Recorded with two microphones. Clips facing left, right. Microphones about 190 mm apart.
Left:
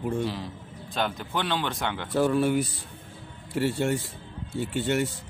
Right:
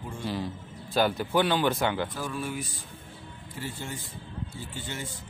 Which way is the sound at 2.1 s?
70° left (ahead or behind).